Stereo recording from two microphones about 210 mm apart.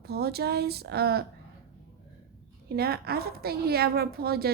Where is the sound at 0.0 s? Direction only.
50° right (ahead or behind).